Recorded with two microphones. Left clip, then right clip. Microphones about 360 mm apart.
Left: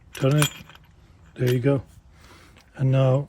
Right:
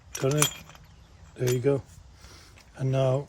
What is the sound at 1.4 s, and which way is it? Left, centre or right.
Speech, left.